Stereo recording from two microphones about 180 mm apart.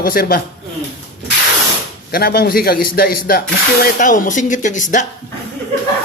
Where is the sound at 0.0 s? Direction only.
55° left (ahead or behind).